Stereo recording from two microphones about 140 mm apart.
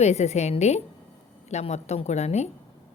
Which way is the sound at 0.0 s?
50° left (ahead or behind).